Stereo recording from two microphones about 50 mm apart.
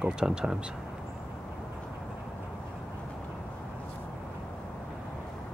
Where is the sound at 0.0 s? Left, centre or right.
Centre.